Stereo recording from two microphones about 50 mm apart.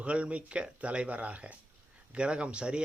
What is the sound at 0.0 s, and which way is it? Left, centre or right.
Speech, right.